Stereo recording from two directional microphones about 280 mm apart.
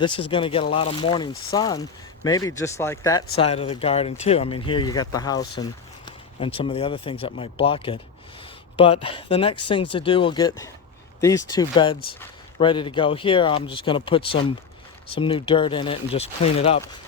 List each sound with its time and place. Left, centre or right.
0.0 s speech: centre